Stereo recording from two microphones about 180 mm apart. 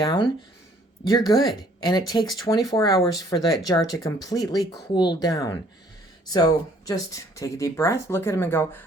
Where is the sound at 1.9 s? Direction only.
25° left (ahead or behind).